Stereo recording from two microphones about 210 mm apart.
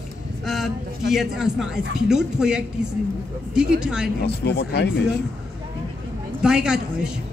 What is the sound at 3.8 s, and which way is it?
Speech, 5° right (ahead or behind).